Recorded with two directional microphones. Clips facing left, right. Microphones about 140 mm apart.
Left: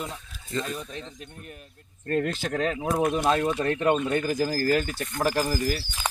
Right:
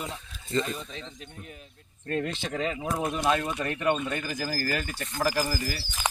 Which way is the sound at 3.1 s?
25° left (ahead or behind).